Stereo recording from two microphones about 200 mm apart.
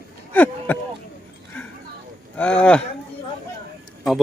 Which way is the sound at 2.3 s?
5° left (ahead or behind).